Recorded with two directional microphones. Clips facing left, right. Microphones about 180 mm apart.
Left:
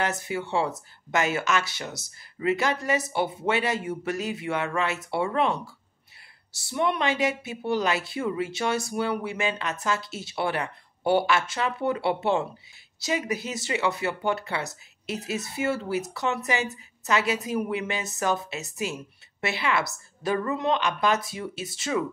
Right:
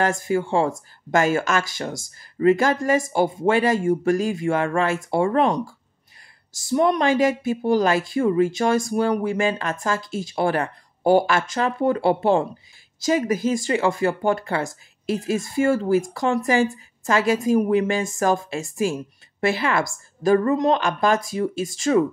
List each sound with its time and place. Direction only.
0.0 s speech: 45° right (ahead or behind)
6.7 s speech: 40° right (ahead or behind)